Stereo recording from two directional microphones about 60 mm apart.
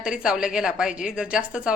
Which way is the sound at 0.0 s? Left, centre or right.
Centre.